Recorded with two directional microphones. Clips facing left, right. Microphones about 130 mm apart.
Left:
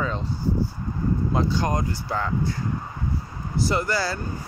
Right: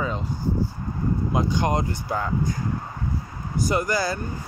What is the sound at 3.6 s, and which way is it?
Speech, 15° right (ahead or behind).